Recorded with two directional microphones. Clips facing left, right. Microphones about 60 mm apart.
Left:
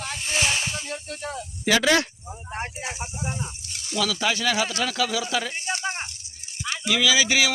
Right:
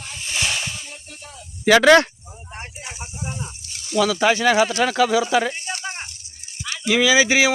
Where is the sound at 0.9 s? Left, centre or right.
Left.